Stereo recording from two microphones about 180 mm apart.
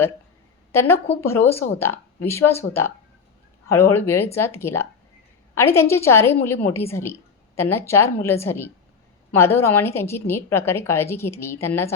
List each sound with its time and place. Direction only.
0.7 s a woman's voice: 15° left (ahead or behind)